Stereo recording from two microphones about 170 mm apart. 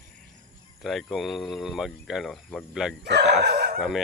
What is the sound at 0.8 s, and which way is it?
Speech, centre (ahead or behind).